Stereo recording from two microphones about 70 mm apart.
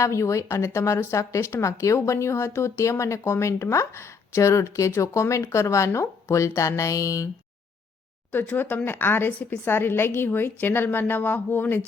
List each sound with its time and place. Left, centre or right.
0.0 s a woman's voice: left
8.3 s a woman's voice: left